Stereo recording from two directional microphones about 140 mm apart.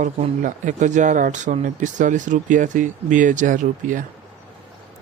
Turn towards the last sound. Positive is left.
turn(degrees=-70)  # may be behind; listen again after turning